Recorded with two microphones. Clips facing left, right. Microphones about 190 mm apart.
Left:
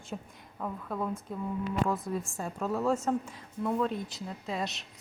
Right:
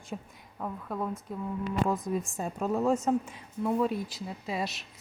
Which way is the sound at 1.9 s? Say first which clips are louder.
Right 2 dB; 15° right (ahead or behind).